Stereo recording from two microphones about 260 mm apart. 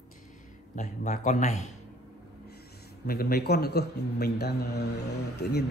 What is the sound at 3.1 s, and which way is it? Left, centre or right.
Speech, left.